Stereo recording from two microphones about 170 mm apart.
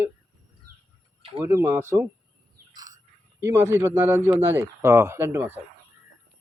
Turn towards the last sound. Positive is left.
turn(degrees=-15)  # may be behind; listen again after turning